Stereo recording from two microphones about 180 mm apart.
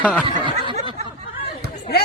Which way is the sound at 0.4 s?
25° right (ahead or behind).